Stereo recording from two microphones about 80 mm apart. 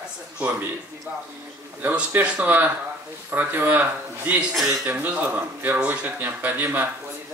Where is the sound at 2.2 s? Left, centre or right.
Centre.